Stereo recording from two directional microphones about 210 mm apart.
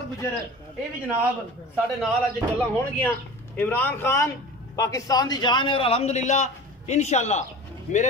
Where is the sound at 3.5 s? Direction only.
10° left (ahead or behind).